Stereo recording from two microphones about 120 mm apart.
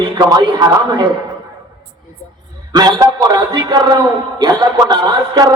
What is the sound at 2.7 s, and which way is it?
A man's voice, 35° right (ahead or behind).